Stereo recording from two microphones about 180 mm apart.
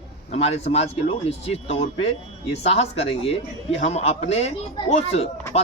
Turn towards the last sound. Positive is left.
turn(degrees=35)  # may be behind; listen again after turning